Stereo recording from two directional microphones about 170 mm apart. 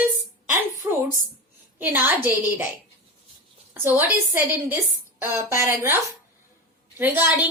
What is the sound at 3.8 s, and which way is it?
Speech, 10° right (ahead or behind).